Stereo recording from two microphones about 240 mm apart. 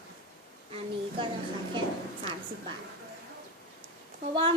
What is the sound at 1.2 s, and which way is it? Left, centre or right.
Speech, centre.